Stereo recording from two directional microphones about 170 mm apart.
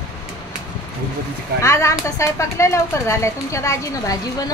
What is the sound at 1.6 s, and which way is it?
Speech, 15° left (ahead or behind).